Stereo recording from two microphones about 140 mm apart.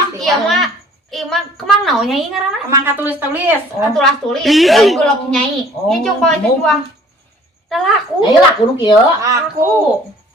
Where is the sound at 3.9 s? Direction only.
Centre (ahead or behind).